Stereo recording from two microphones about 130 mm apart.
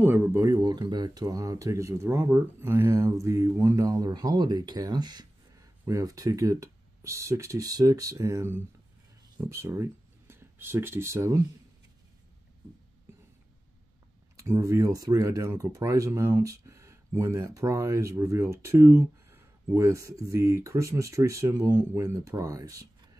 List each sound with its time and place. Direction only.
0.0 s speech: 20° right (ahead or behind)
14.3 s speech: 20° right (ahead or behind)